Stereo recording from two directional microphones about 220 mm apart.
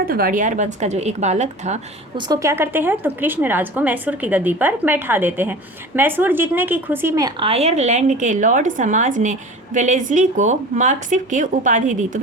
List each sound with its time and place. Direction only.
0.0 s speech: 40° right (ahead or behind)
2.2 s a woman's voice: 15° right (ahead or behind); by 12.2 s 35° right (ahead or behind)